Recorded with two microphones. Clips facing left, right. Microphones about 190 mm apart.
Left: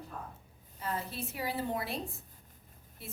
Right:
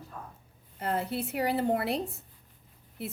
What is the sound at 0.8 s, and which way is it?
A woman's voice, 65° right (ahead or behind).